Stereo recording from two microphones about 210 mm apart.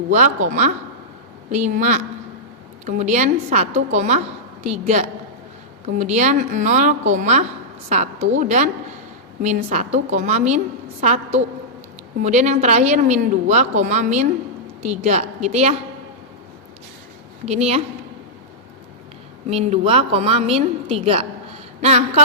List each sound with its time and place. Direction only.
0.1 s a woman's voice: 35° right (ahead or behind)
17.4 s a woman's voice: 30° right (ahead or behind)
19.5 s a woman's voice: 30° right (ahead or behind)